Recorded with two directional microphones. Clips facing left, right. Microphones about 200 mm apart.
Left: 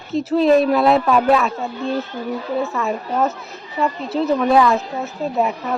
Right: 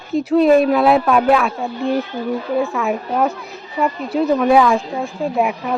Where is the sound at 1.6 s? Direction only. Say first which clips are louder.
Right 3 dB; 15° right (ahead or behind).